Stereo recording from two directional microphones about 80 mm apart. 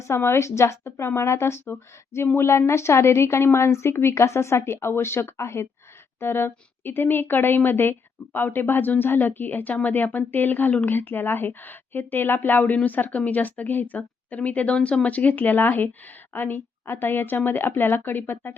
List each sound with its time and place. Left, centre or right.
0.1 s a woman's voice: left